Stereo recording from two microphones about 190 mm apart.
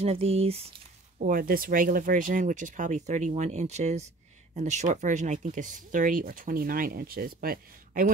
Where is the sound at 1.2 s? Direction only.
50° right (ahead or behind).